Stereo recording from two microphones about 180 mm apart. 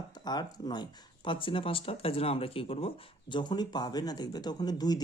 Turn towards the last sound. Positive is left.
turn(degrees=20)  # may be behind; listen again after turning